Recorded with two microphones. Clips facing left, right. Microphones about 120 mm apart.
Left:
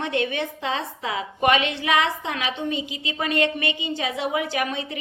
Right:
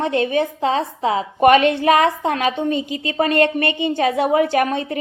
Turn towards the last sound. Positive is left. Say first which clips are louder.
# right 9 dB
turn(degrees=-45)  # may be behind; listen again after turning